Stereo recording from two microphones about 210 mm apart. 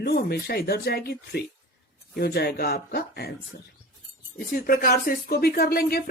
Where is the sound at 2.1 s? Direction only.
50° left (ahead or behind).